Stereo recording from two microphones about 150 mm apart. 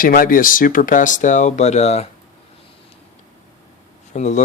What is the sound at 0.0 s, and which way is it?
Speech, 75° left (ahead or behind).